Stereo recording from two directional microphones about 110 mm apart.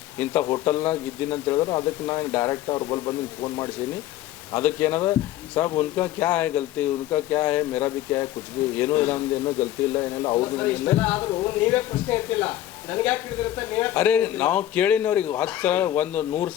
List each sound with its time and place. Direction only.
0.2 s speech: 15° left (ahead or behind)
1.5 s a man's voice: 35° left (ahead or behind)
4.5 s a man's voice: 15° left (ahead or behind)
9.9 s speech: 30° left (ahead or behind)
10.4 s a man's voice: 20° left (ahead or behind)